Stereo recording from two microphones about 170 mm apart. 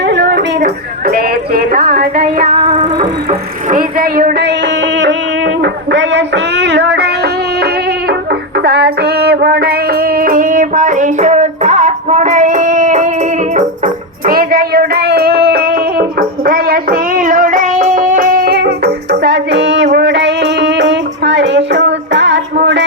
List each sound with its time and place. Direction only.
0.0 s speech: 90° right
5.6 s a sound: 90° right
7.6 s music: 70° right (ahead or behind); by 22.9 s 90° right